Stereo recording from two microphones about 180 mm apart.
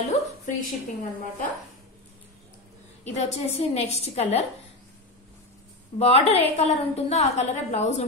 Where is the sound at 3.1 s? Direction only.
35° left (ahead or behind).